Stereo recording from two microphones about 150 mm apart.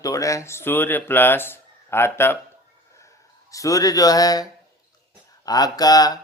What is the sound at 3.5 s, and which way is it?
Speech, 25° left (ahead or behind).